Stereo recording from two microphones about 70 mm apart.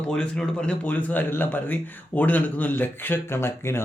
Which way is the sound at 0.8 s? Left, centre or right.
Left.